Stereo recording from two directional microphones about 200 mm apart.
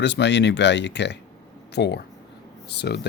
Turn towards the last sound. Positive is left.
turn(degrees=55)  # may be behind; listen again after turning